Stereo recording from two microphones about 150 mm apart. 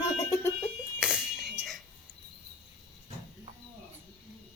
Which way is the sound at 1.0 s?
5° right (ahead or behind).